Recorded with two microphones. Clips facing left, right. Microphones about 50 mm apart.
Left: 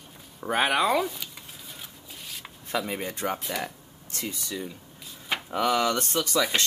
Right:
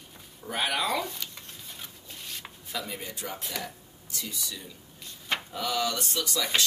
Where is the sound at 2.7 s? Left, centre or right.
Left.